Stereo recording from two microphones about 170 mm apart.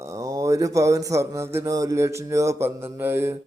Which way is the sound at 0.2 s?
20° right (ahead or behind).